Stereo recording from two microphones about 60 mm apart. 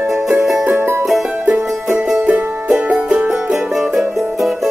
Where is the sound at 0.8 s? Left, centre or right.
Right.